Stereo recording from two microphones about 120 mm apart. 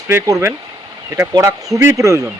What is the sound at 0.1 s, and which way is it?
Speech, 25° right (ahead or behind).